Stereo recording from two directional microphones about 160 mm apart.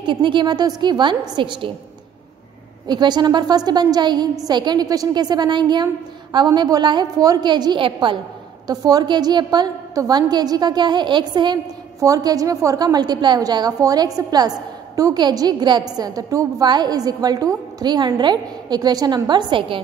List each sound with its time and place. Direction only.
0.0 s a woman's voice: 30° right (ahead or behind)
2.9 s a woman's voice: 25° right (ahead or behind)